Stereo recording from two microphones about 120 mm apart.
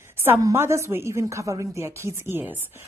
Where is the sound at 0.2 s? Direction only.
25° right (ahead or behind).